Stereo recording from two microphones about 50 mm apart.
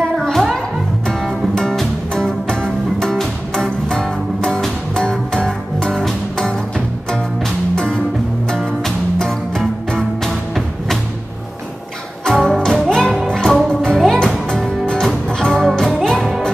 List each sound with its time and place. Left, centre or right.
0.2 s music: centre
1.0 s music: centre
7.1 s music: centre
12.3 s music: centre
15.8 s music: centre